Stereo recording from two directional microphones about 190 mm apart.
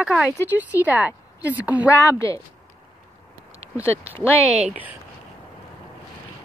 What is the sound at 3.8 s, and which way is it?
Speech, 15° left (ahead or behind).